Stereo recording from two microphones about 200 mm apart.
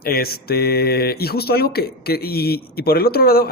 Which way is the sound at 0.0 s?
50° left (ahead or behind).